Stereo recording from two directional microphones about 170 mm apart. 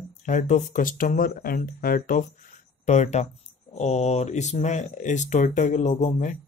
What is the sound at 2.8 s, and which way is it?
Speech, 45° left (ahead or behind).